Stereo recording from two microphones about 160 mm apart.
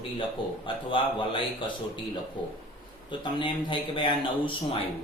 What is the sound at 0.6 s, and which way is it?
Speech, 30° left (ahead or behind).